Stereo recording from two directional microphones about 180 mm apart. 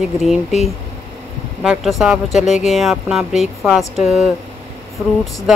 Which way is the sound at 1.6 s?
5° right (ahead or behind).